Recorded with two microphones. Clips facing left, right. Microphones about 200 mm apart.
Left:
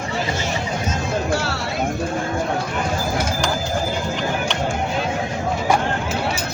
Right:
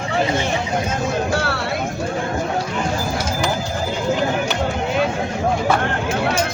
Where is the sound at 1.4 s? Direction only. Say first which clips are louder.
Right 3 dB; 60° right (ahead or behind).